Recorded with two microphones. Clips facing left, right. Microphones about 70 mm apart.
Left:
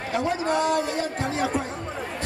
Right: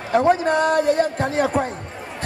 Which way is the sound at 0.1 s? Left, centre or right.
Right.